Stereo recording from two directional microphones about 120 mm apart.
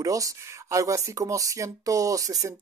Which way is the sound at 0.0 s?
30° right (ahead or behind).